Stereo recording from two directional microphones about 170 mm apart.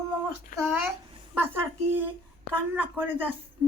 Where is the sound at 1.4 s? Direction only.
15° right (ahead or behind).